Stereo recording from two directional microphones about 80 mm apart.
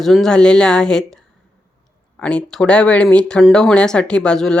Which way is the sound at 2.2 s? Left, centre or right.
Centre.